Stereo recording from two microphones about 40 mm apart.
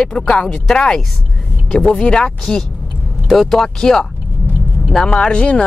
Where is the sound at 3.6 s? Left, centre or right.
Centre.